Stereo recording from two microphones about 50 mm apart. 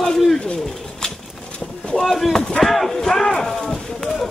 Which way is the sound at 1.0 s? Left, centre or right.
Centre.